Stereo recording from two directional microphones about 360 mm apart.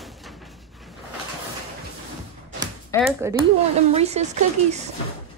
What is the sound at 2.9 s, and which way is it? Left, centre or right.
Speech, centre.